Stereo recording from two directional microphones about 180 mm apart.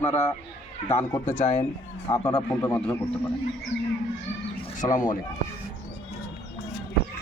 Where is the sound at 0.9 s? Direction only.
15° left (ahead or behind).